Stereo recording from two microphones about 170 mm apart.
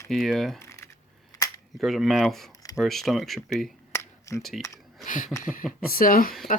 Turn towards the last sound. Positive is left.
turn(degrees=55)  # may be behind; listen again after turning